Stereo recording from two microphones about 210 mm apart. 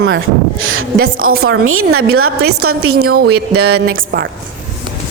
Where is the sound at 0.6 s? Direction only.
75° right (ahead or behind).